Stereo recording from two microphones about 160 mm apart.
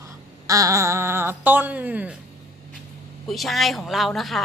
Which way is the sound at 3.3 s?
Centre (ahead or behind).